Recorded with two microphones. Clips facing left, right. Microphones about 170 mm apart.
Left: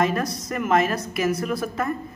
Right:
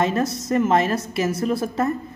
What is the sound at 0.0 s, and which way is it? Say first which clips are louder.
Speech: right 2 dB; 25° right (ahead or behind).